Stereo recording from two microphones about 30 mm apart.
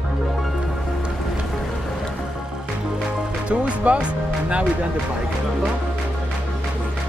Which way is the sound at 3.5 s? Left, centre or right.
Right.